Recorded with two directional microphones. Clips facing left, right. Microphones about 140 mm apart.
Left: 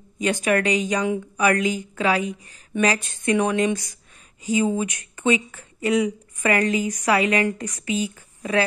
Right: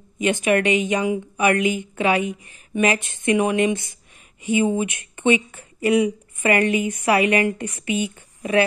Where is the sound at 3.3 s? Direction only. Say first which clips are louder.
Right 2 dB; 15° right (ahead or behind).